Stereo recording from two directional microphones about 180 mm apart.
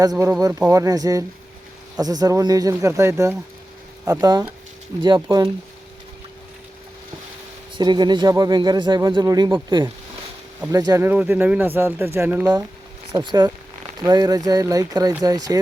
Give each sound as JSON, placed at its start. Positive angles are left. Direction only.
{"t": 0.0, "sound": "speech", "side_deg": -20}
{"t": 7.8, "sound": "speech", "side_deg": -25}
{"t": 13.1, "sound": "speech", "side_deg": -25}